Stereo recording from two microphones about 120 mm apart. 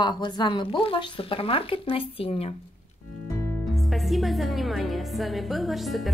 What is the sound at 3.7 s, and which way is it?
A woman's voice, centre (ahead or behind).